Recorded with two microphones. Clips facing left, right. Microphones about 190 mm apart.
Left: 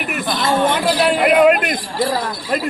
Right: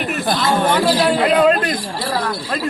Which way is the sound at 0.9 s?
15° left (ahead or behind).